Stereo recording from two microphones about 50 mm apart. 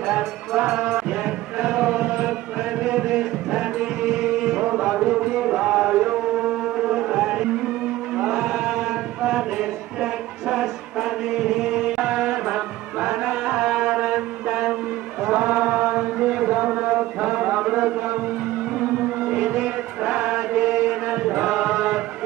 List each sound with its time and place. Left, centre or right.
0.0 s music: centre
8.2 s chant: centre
10.5 s music: centre
13.5 s mantra: centre
15.2 s chant: right
16.3 s a sound: right
17.4 s mantra: right
18.8 s music: right
20.5 s chant: centre